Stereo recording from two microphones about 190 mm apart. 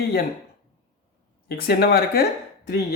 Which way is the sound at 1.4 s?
55° left (ahead or behind).